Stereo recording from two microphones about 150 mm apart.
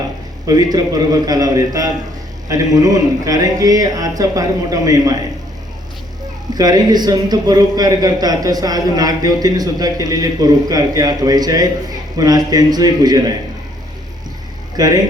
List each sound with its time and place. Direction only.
0.4 s a man's voice: 25° right (ahead or behind)
6.5 s a man's voice: 25° right (ahead or behind)
14.8 s a man's voice: 25° right (ahead or behind)